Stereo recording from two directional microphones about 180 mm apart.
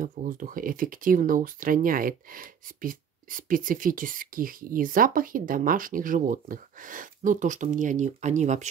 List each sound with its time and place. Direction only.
0.0 s speech: 50° right (ahead or behind)